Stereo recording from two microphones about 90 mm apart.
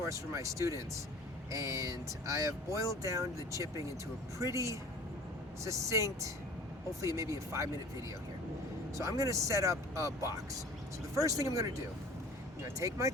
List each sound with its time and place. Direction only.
0.0 s speech: 35° right (ahead or behind)
9.0 s speech: 35° right (ahead or behind)